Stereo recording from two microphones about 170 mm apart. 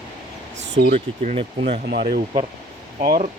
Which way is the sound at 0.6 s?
90° right.